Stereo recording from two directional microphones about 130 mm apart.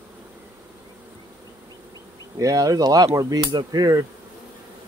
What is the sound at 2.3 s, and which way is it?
Speech, 25° right (ahead or behind).